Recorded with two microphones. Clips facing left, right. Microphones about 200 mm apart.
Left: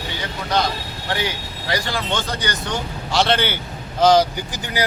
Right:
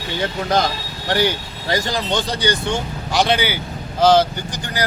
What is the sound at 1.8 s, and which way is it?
Speech, 40° right (ahead or behind).